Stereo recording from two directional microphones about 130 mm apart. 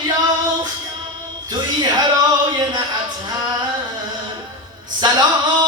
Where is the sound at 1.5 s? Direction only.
35° right (ahead or behind).